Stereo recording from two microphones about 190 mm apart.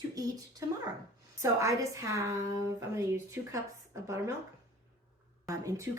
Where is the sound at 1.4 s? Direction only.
15° right (ahead or behind).